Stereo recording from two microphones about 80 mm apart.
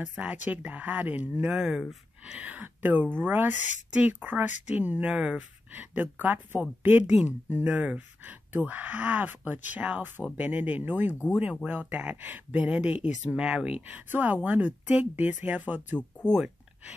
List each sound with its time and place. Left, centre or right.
0.2 s speech: centre
2.3 s speech: centre
16.3 s speech: centre